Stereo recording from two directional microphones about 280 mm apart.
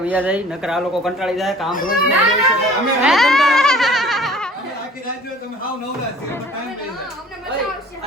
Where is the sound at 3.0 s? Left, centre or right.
Centre.